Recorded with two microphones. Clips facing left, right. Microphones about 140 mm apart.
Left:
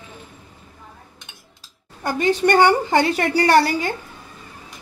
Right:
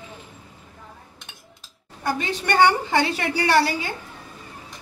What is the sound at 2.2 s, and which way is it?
A woman's voice, 45° left (ahead or behind).